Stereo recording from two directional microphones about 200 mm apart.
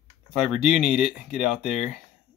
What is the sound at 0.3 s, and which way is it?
Speech, 5° right (ahead or behind).